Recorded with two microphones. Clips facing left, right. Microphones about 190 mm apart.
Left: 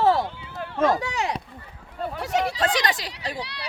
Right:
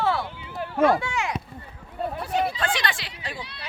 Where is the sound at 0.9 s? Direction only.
40° left (ahead or behind).